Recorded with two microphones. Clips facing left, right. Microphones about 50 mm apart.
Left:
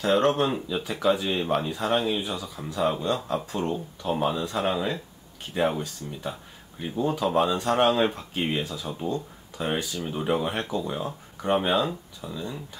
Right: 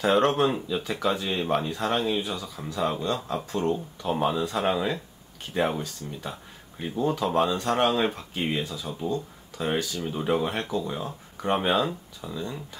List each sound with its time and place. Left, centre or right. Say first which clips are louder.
0.1 s speech: left 1 dB; centre
2.2 s speech: even; centre
8.6 s speech: left 1 dB; left
9.9 s speech: even; centre
11.4 s speech: left 1 dB; centre